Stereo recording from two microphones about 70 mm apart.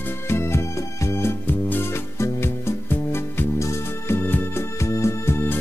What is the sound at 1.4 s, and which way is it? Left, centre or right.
Music, left.